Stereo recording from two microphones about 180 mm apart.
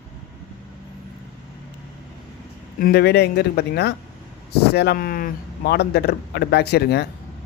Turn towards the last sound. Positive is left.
turn(degrees=65)  # may be behind; listen again after turning